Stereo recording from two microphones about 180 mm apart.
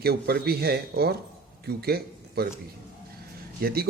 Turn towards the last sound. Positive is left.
turn(degrees=-55)  # may be behind; listen again after turning